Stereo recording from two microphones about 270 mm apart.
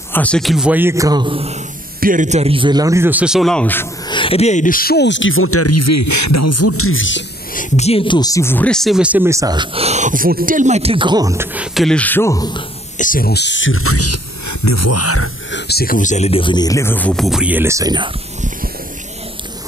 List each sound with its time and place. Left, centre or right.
0.1 s a man's voice: centre
2.0 s a man's voice: right; by 3.8 s centre
4.1 s speech: centre; by 7.2 s left
7.5 s speech: left
12.9 s speech: left
15.5 s speech: left; by 18.1 s centre